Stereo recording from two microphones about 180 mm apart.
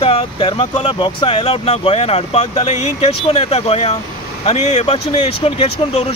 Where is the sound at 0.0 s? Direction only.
30° left (ahead or behind).